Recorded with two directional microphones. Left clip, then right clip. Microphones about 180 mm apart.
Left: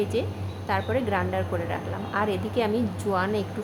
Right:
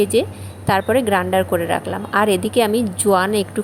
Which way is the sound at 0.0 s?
35° right (ahead or behind).